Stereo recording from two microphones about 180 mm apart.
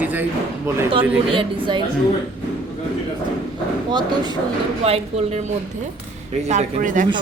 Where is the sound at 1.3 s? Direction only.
25° right (ahead or behind).